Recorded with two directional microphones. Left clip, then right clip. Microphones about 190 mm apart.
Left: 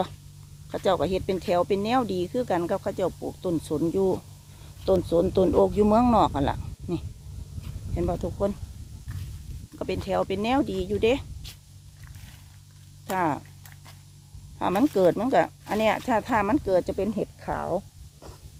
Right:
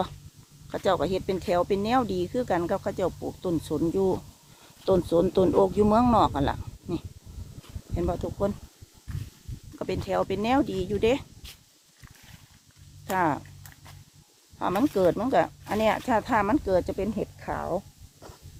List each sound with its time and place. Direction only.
0.7 s speech: centre (ahead or behind)
9.7 s speech: centre (ahead or behind)
13.1 s speech: centre (ahead or behind)
14.6 s speech: 15° left (ahead or behind)